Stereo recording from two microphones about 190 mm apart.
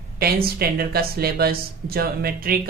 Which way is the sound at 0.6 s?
55° right (ahead or behind).